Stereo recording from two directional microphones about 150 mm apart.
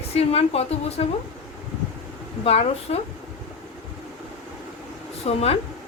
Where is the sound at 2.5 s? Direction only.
45° left (ahead or behind).